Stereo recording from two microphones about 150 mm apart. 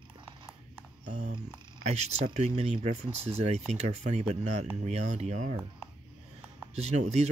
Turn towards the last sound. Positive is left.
turn(degrees=-50)  # may be behind; listen again after turning